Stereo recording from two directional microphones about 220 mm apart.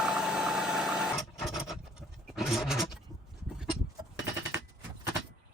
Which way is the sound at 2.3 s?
Centre (ahead or behind).